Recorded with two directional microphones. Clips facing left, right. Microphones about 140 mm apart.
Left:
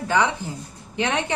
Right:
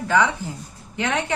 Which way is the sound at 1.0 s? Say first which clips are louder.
Even; 20° left (ahead or behind).